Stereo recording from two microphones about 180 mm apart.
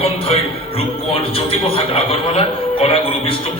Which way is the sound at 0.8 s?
30° left (ahead or behind).